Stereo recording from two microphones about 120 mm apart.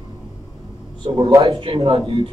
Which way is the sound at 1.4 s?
50° right (ahead or behind).